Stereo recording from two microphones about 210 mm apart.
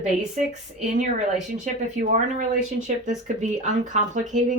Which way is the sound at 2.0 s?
35° right (ahead or behind).